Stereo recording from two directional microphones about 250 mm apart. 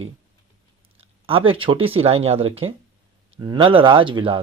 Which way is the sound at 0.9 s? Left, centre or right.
Right.